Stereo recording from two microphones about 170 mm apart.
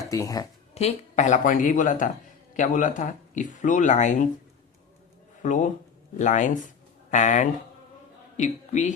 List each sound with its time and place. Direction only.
0.0 s speech: 20° left (ahead or behind)
0.7 s speech: 35° left (ahead or behind)
5.4 s speech: 45° left (ahead or behind)